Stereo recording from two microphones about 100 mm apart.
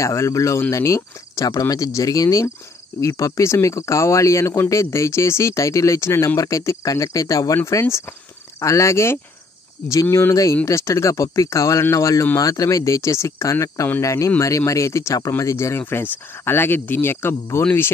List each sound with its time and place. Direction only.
0.0 s speech: 30° left (ahead or behind)